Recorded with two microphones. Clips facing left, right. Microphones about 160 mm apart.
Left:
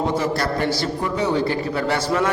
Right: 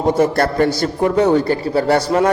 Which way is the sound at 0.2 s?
55° right (ahead or behind).